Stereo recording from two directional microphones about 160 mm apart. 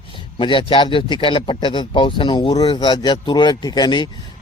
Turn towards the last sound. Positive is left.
turn(degrees=25)  # may be behind; listen again after turning